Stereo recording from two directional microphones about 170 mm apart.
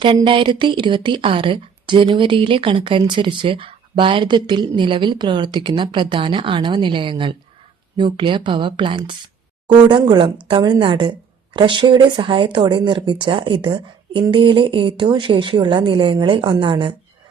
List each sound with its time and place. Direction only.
0.0 s a woman's voice: 30° right (ahead or behind)